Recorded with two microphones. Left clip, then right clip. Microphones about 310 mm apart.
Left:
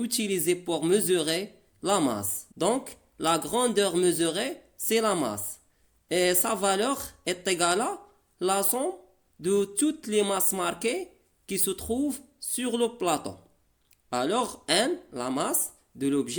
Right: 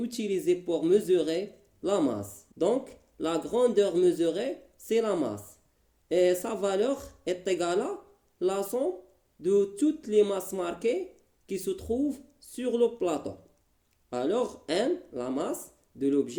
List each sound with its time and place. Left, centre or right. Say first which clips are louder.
0.0 s speech: left 1 dB; left